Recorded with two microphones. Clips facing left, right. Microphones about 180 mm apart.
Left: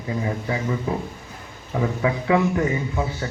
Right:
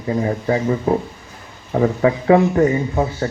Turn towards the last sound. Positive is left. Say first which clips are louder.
# right 6 dB
turn(degrees=-45)  # may be behind; listen again after turning